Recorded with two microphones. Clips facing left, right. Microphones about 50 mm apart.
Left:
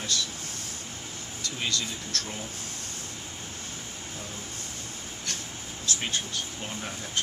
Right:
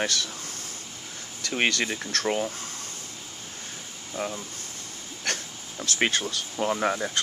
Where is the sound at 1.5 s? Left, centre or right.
Right.